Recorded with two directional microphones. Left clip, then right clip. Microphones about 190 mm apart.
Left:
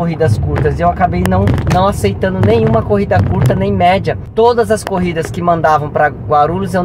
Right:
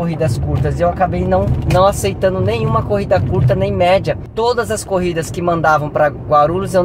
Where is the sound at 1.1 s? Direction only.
Centre (ahead or behind).